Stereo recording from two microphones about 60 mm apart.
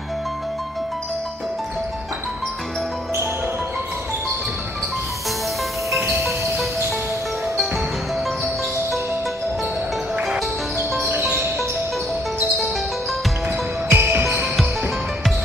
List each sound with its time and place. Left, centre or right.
11.1 s music: right
13.8 s music: right